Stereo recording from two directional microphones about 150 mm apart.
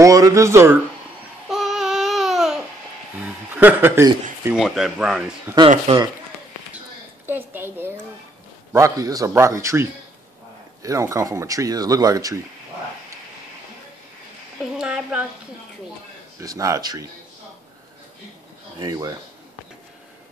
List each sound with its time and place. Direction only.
0.0 s speech: 20° right (ahead or behind)
1.5 s babbling: centre (ahead or behind)
3.2 s speech: 10° right (ahead or behind)
4.6 s speech: centre (ahead or behind)
5.5 s a woman's voice: 15° right (ahead or behind)
5.9 s speech: 45° right (ahead or behind)
7.2 s a woman's voice: 15° right (ahead or behind)
14.6 s a woman's voice: 5° right (ahead or behind)
16.3 s speech: 20° right (ahead or behind)
18.8 s speech: 25° right (ahead or behind)